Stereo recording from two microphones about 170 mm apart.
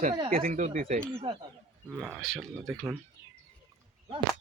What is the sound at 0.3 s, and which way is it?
Speech, 55° right (ahead or behind).